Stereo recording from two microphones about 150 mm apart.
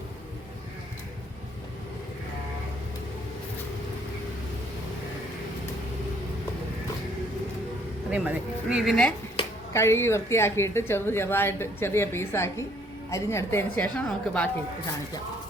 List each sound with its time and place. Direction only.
8.1 s speech: 10° right (ahead or behind)
9.7 s speech: 20° left (ahead or behind)